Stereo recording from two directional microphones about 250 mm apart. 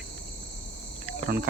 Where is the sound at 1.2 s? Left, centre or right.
Right.